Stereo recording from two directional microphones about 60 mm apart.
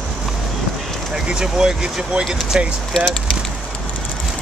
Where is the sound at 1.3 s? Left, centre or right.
Centre.